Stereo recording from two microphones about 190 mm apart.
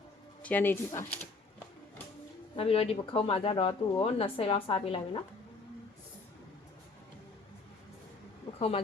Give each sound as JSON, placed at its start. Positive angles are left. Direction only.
{"t": 0.4, "sound": "speech", "side_deg": 10}
{"t": 2.6, "sound": "speech", "side_deg": 30}
{"t": 8.5, "sound": "speech", "side_deg": 30}